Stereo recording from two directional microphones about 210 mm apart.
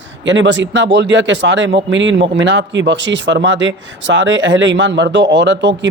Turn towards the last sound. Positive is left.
turn(degrees=-60)  # may be behind; listen again after turning